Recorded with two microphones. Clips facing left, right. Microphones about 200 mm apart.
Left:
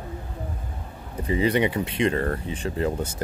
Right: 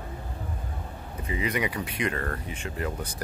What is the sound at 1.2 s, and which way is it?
Speech, 30° left (ahead or behind).